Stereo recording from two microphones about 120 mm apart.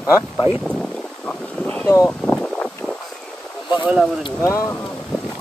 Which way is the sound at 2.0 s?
10° left (ahead or behind).